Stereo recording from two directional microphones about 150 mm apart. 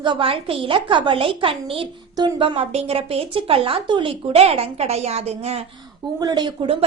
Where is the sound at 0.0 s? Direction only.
35° right (ahead or behind).